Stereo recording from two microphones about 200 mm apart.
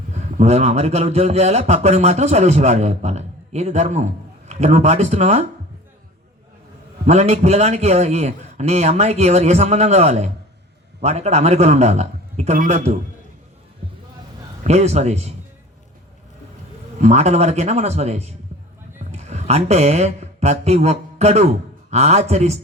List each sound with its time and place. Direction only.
0.1 s speech: 35° right (ahead or behind)
7.0 s speech: 35° right (ahead or behind)
14.6 s speech: 35° right (ahead or behind)
17.0 s speech: 35° right (ahead or behind)